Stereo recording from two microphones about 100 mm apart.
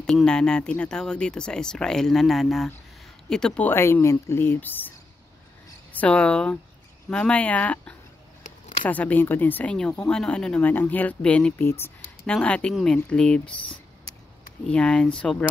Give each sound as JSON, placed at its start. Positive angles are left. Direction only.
{"t": 0.0, "sound": "speech", "side_deg": 5}
{"t": 3.6, "sound": "speech", "side_deg": 25}
{"t": 5.9, "sound": "speech", "side_deg": 10}
{"t": 11.6, "sound": "speech", "side_deg": 25}
{"t": 12.3, "sound": "speech", "side_deg": 10}